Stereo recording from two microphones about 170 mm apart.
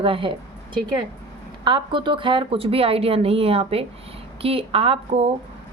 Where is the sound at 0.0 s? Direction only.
30° right (ahead or behind).